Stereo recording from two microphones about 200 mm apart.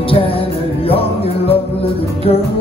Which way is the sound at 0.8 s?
30° left (ahead or behind).